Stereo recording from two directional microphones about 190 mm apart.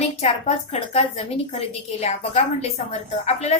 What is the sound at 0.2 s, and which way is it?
A woman's voice, 35° left (ahead or behind).